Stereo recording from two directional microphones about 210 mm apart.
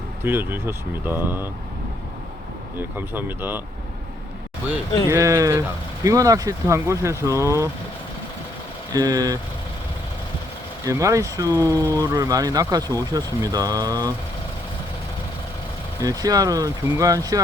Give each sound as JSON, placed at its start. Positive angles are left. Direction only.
{"t": 0.3, "sound": "speech", "side_deg": -10}
{"t": 3.1, "sound": "speech", "side_deg": -10}
{"t": 5.0, "sound": "speech", "side_deg": -15}
{"t": 8.9, "sound": "speech", "side_deg": -15}
{"t": 10.8, "sound": "speech", "side_deg": -15}
{"t": 16.0, "sound": "speech", "side_deg": -15}